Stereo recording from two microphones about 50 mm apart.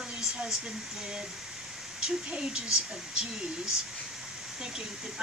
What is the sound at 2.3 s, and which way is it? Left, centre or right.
Speech, centre.